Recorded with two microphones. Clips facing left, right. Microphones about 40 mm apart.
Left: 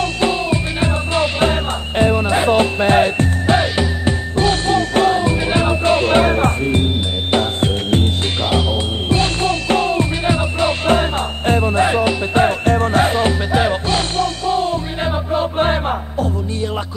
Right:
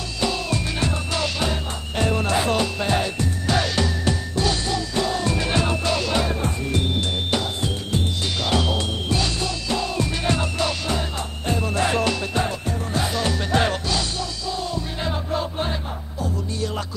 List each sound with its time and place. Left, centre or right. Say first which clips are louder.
0.2 s music: left 3 dB; left
4.4 s music: left 11 dB; left
5.1 s music: left 6 dB; left
6.7 s music: left 5 dB; left
8.5 s music: left 3 dB; left
9.1 s music: left 9 dB; left
10.2 s music: left 6 dB; left
10.7 s music: left 10 dB; left
11.6 s music: left 4 dB; left
12.4 s music: left 11 dB; left
13.5 s music: left 1 dB; centre
13.8 s music: left 8 dB; left